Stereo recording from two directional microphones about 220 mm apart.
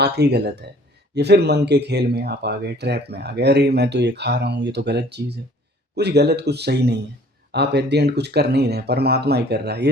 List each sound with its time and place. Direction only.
0.0 s speech: 50° right (ahead or behind)